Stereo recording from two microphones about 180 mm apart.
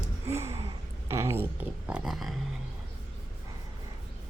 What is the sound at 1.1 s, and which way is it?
Speech, 15° right (ahead or behind).